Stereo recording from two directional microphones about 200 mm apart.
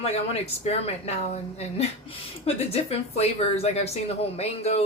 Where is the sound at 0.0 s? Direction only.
30° left (ahead or behind).